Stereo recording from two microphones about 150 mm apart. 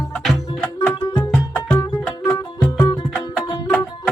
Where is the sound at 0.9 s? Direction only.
25° left (ahead or behind).